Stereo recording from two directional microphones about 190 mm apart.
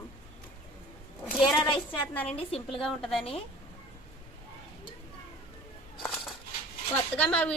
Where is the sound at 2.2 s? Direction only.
30° left (ahead or behind).